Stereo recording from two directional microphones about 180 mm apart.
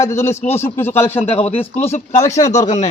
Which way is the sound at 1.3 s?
30° left (ahead or behind).